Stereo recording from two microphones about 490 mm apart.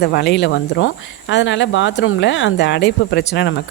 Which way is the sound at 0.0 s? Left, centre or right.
Centre.